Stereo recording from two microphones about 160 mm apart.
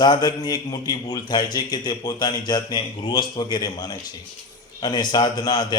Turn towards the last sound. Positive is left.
turn(degrees=25)  # may be behind; listen again after turning